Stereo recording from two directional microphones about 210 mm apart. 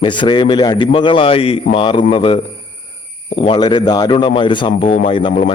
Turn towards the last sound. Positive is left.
turn(degrees=25)  # may be behind; listen again after turning